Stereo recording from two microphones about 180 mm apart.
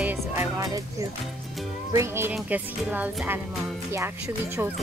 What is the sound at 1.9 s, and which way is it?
A woman's voice, 15° right (ahead or behind).